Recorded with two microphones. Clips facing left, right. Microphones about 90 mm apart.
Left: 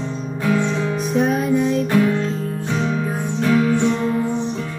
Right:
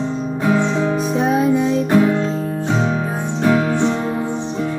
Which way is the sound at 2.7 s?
25° right (ahead or behind).